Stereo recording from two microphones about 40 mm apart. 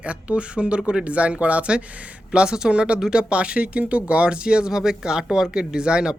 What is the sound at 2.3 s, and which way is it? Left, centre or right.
Speech, right.